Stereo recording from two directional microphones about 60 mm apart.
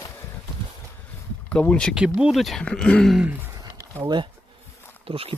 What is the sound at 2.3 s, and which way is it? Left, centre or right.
Speech, centre.